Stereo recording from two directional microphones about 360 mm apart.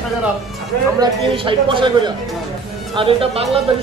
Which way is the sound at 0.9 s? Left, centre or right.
Centre.